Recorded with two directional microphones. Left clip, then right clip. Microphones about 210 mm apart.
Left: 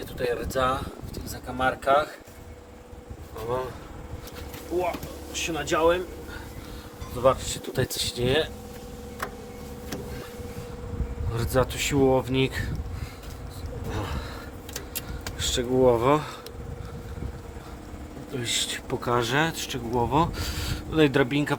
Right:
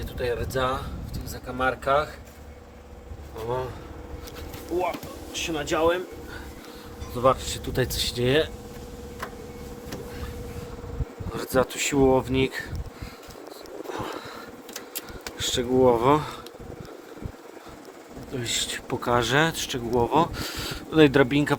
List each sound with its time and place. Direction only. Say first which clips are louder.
0.2 s speech: left 1 dB; 10° right (ahead or behind)
5.3 s speech: even; 20° right (ahead or behind)
7.2 s speech: right 1 dB; 25° right (ahead or behind)
11.3 s speech: right 1 dB; 5° right (ahead or behind)
13.9 s a sound: right 1 dB; 5° right (ahead or behind)
15.2 s speech: right 1 dB; 5° right (ahead or behind)
18.3 s speech: even; 5° right (ahead or behind)